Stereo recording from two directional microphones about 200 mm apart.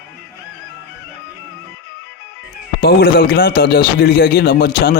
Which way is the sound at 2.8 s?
50° left (ahead or behind).